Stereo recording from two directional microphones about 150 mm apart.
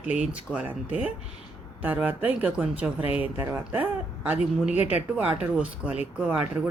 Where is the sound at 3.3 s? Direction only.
15° right (ahead or behind).